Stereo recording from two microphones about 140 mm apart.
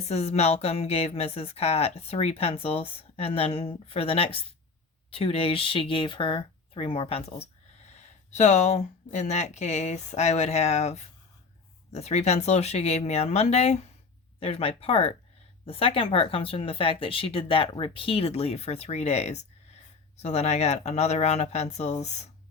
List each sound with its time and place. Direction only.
0.0 s speech: 50° left (ahead or behind)
7.9 s speech: 55° left (ahead or behind)